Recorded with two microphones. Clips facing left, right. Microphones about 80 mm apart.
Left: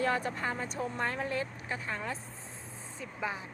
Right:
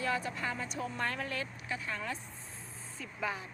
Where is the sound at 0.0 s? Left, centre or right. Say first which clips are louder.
Left 3 dB; left.